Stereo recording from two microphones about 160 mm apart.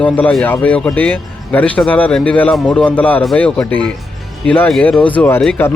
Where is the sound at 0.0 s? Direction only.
5° left (ahead or behind).